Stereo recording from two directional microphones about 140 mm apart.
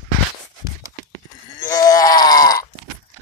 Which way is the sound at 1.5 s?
25° left (ahead or behind).